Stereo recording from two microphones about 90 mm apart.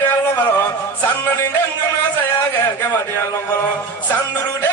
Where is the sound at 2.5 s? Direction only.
25° left (ahead or behind).